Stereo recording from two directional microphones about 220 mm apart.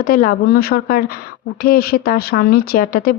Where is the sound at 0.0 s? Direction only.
40° left (ahead or behind).